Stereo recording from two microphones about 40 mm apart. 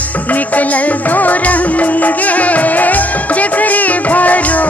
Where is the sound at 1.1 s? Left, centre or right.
Left.